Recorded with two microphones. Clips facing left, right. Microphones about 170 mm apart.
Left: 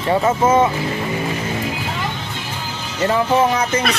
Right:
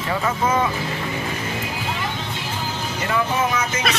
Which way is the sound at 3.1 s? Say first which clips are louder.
Left 5 dB; 35° left (ahead or behind).